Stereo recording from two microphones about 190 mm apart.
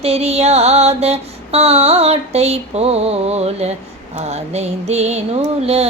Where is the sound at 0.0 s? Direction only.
35° right (ahead or behind).